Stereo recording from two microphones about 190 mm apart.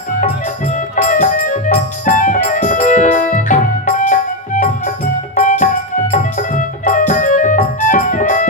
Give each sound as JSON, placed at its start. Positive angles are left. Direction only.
{"t": 0.7, "sound": "music", "side_deg": 40}